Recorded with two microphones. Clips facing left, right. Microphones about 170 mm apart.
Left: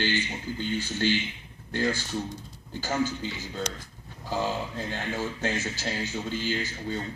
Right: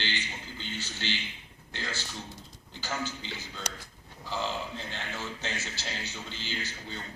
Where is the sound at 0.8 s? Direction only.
50° left (ahead or behind).